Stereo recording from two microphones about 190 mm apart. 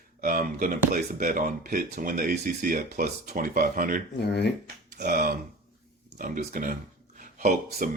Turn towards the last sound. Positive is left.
turn(degrees=-40)  # may be behind; listen again after turning